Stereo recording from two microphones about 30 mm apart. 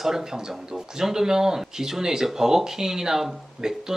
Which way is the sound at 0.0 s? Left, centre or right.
Centre.